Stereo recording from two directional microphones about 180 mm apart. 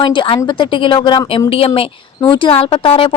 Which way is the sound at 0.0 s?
25° left (ahead or behind).